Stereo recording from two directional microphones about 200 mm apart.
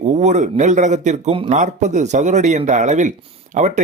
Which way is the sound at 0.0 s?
35° right (ahead or behind).